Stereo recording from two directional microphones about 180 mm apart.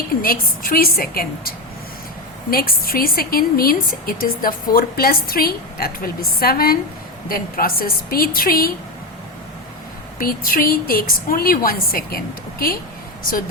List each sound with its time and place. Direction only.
0.2 s a woman's voice: 55° left (ahead or behind)
10.2 s a woman's voice: 50° left (ahead or behind)